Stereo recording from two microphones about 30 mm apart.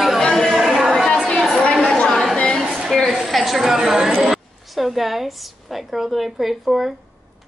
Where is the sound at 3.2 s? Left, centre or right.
Centre.